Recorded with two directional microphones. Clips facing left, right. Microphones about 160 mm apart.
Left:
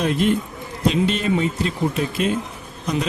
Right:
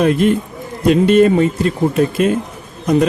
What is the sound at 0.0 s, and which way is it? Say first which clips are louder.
Speech: right 6 dB; 50° right (ahead or behind).